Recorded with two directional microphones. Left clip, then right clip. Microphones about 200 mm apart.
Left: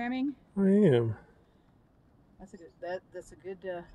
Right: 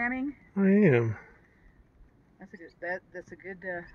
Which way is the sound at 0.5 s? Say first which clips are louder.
Right 1 dB; 5° right (ahead or behind).